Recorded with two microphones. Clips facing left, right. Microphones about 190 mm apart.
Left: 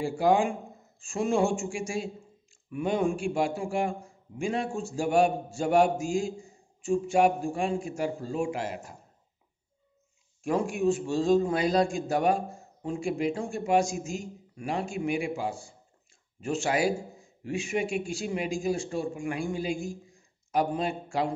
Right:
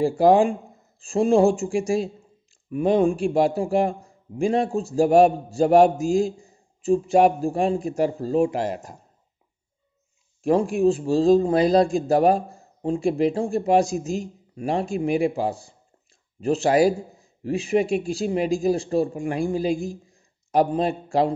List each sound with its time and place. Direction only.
0.0 s a man's voice: 35° right (ahead or behind)
10.4 s a man's voice: 35° right (ahead or behind)